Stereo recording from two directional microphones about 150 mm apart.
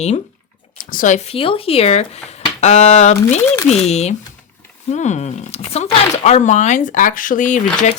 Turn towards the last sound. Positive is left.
turn(degrees=55)  # may be behind; listen again after turning